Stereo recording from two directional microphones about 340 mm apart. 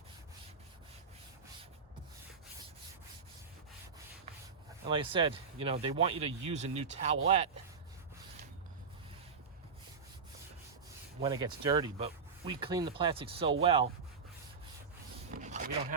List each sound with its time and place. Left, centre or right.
4.9 s speech: centre
11.2 s speech: centre
15.3 s a sound: right